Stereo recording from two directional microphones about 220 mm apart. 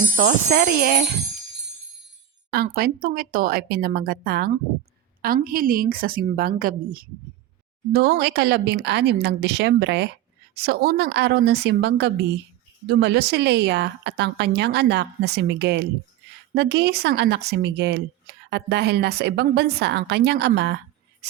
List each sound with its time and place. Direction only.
0.2 s a woman's voice: 35° right (ahead or behind)
2.5 s a woman's voice: 45° right (ahead or behind)